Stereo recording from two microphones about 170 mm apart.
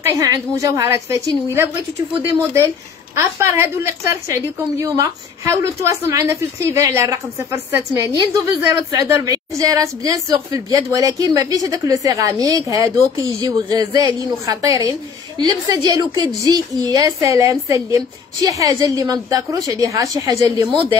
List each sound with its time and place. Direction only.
0.0 s a woman's voice: 20° right (ahead or behind)